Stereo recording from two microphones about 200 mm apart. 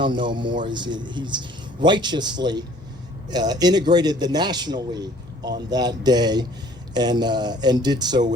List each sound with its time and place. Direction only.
0.0 s speech: 25° right (ahead or behind)